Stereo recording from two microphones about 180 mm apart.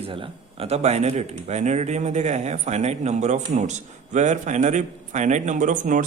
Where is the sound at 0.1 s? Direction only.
30° right (ahead or behind).